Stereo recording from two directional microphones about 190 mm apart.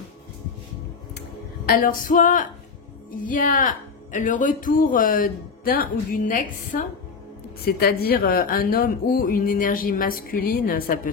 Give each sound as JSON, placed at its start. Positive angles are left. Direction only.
{"t": 1.7, "sound": "speech", "side_deg": 45}